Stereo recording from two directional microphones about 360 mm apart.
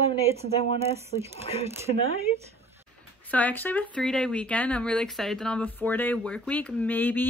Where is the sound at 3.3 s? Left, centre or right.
Centre.